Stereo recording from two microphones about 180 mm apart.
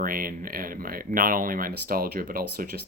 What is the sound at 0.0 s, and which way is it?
Speech, 50° right (ahead or behind).